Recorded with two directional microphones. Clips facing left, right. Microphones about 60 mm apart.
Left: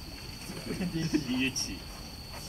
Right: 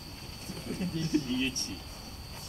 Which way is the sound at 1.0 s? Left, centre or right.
Left.